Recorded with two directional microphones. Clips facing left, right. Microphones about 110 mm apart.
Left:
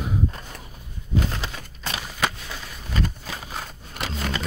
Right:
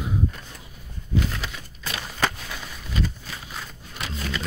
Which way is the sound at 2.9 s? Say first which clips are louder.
Left 1 dB; 45° left (ahead or behind).